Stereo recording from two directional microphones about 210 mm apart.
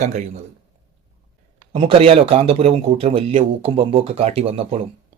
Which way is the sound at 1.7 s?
25° right (ahead or behind).